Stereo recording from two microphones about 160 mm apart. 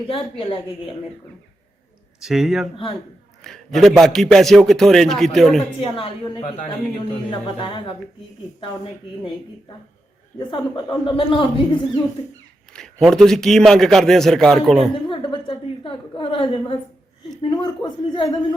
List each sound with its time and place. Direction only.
0.1 s a woman's voice: 35° left (ahead or behind)
2.2 s a man's voice: 5° right (ahead or behind)
5.8 s a woman's voice: 35° left (ahead or behind)
10.5 s speech: 30° left (ahead or behind)
12.7 s a man's voice: 5° left (ahead or behind)
14.9 s a sound: 30° left (ahead or behind)
17.5 s speech: 30° left (ahead or behind)